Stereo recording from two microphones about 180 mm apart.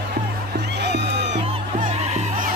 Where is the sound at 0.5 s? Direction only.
70° right (ahead or behind).